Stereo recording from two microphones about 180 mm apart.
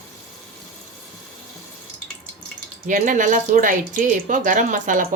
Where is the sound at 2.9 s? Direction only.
45° right (ahead or behind).